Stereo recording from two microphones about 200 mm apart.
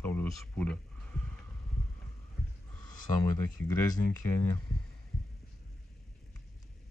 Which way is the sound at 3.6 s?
90° left.